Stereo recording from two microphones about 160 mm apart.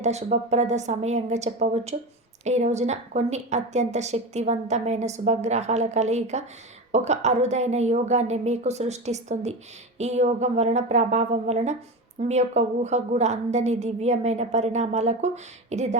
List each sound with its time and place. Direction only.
0.0 s a woman's voice: 45° right (ahead or behind)